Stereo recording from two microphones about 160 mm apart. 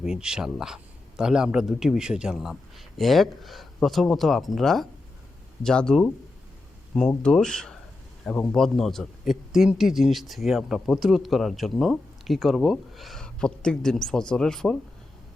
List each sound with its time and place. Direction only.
0.0 s a man's voice: 5° right (ahead or behind)
7.2 s a man's voice: 5° left (ahead or behind)